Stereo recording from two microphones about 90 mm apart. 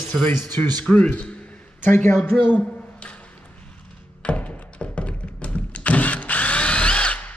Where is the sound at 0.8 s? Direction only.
15° left (ahead or behind).